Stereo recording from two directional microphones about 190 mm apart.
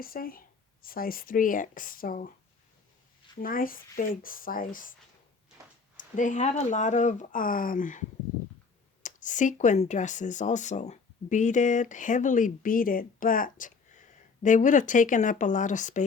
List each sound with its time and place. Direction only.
0.0 s speech: 50° left (ahead or behind)
3.4 s speech: 50° left (ahead or behind)
6.0 s speech: 40° left (ahead or behind)
9.0 s speech: 40° left (ahead or behind)